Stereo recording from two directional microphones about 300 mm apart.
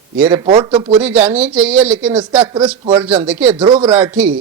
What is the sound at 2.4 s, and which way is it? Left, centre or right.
Speech, centre.